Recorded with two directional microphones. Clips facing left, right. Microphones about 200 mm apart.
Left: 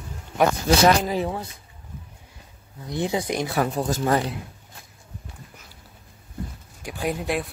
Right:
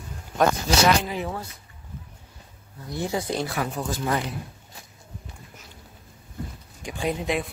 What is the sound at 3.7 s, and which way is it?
Speech, 45° left (ahead or behind).